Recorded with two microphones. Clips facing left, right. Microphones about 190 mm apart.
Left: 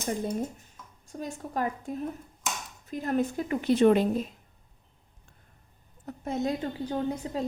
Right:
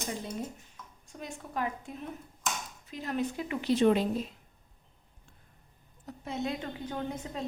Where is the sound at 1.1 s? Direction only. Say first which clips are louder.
Left 5 dB; 40° left (ahead or behind).